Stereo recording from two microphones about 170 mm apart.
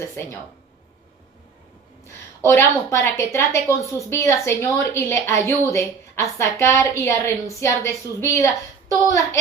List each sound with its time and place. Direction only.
0.0 s a woman's voice: 15° left (ahead or behind)
2.4 s a woman's voice: 15° left (ahead or behind)
9.0 s a sound: 20° left (ahead or behind)